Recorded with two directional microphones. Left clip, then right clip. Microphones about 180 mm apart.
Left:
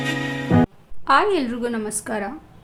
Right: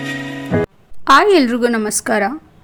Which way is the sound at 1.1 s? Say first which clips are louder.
Right 8 dB; 50° right (ahead or behind).